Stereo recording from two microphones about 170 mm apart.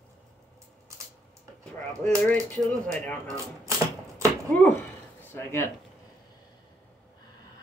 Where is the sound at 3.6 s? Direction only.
20° right (ahead or behind).